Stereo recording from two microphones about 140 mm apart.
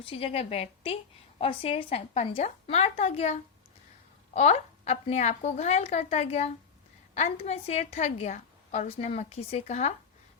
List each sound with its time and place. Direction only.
0.0 s a woman's voice: 40° left (ahead or behind)